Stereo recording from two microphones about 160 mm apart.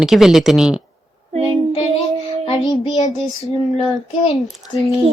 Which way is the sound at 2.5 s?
25° left (ahead or behind).